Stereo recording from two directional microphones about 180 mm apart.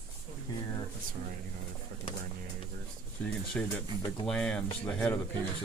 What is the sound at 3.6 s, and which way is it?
Speech, 10° left (ahead or behind).